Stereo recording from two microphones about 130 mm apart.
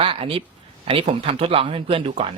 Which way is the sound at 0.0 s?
45° right (ahead or behind).